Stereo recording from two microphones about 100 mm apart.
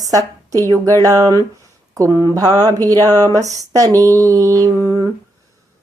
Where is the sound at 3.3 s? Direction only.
35° right (ahead or behind).